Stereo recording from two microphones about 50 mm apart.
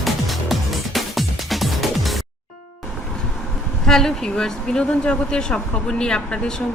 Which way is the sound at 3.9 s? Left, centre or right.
Centre.